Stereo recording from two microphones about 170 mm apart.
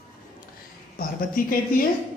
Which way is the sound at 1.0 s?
55° left (ahead or behind).